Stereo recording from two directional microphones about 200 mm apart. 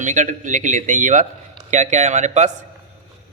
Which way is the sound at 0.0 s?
40° right (ahead or behind).